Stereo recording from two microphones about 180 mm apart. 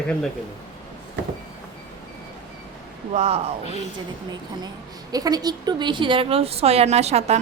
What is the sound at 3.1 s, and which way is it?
Speech, 35° right (ahead or behind).